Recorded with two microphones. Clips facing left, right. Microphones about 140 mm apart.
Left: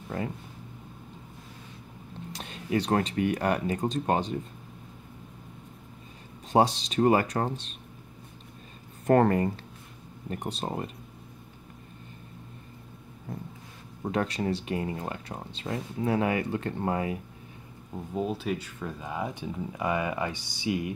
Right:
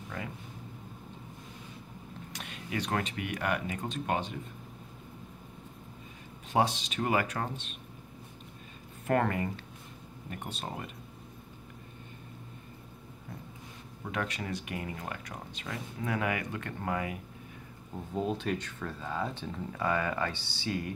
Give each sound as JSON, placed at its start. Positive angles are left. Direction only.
{"t": 0.1, "sound": "speech", "side_deg": 35}
{"t": 2.3, "sound": "speech", "side_deg": 30}
{"t": 6.5, "sound": "speech", "side_deg": 35}
{"t": 9.0, "sound": "speech", "side_deg": 35}
{"t": 14.0, "sound": "speech", "side_deg": 35}
{"t": 18.1, "sound": "speech", "side_deg": 5}